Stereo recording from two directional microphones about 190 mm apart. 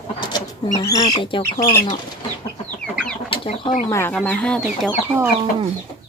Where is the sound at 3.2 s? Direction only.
30° left (ahead or behind).